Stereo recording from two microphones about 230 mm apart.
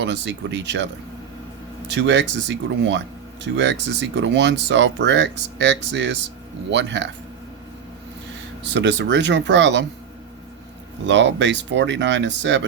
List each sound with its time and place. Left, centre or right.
0.0 s speech: right
1.9 s speech: right
8.7 s speech: right
11.0 s speech: right